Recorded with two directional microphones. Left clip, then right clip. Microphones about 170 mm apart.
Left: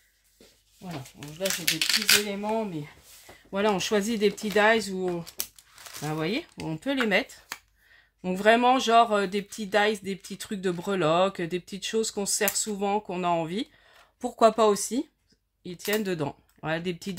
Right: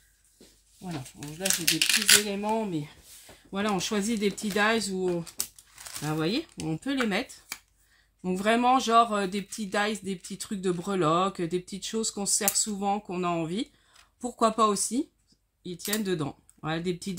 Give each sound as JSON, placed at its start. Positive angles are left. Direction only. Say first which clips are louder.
{"t": 1.2, "sound": "speech", "louder": "even", "side_deg": 20}
{"t": 3.5, "sound": "speech", "louder": "left 4 dB", "side_deg": 50}
{"t": 6.0, "sound": "speech", "louder": "even", "side_deg": 45}